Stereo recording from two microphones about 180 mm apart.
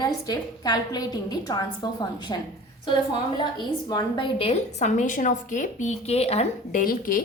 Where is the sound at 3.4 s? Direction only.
25° left (ahead or behind).